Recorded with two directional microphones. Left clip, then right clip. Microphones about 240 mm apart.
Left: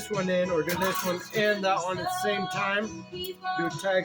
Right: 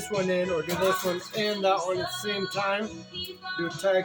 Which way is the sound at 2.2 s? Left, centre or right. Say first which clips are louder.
Left 1 dB; centre.